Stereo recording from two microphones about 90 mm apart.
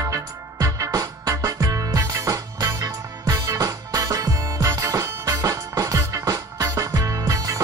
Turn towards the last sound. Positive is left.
turn(degrees=-40)  # may be behind; listen again after turning